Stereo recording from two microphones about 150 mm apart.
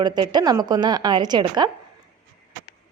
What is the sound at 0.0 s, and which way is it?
Speech, 30° right (ahead or behind).